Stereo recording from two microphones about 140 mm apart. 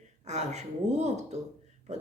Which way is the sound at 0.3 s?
55° right (ahead or behind).